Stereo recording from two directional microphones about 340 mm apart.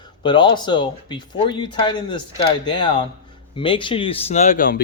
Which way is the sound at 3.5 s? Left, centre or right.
Centre.